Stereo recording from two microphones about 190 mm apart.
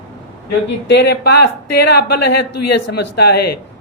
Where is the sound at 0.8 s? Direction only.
65° left (ahead or behind).